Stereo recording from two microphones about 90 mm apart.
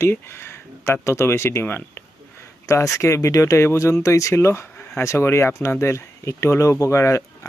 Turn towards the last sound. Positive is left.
turn(degrees=30)  # may be behind; listen again after turning